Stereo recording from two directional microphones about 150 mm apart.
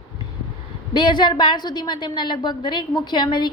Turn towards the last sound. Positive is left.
turn(degrees=30)  # may be behind; listen again after turning